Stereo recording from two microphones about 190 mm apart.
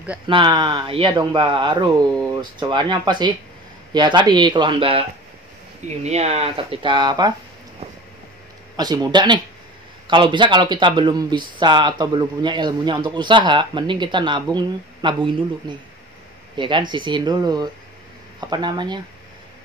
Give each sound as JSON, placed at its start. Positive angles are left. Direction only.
{"t": 0.3, "sound": "speech", "side_deg": -25}
{"t": 6.0, "sound": "speech", "side_deg": -35}
{"t": 8.7, "sound": "speech", "side_deg": -20}